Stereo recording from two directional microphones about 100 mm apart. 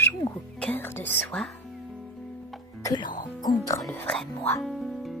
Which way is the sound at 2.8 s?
45° left (ahead or behind).